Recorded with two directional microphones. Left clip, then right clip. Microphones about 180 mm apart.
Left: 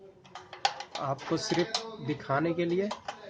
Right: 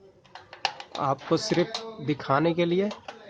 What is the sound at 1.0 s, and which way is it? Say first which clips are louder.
Speech: right 7 dB; 45° right (ahead or behind).